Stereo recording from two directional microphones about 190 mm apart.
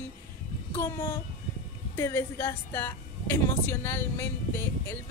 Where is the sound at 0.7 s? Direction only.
20° left (ahead or behind).